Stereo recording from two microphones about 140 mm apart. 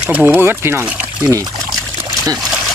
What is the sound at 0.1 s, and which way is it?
Speech, 10° right (ahead or behind).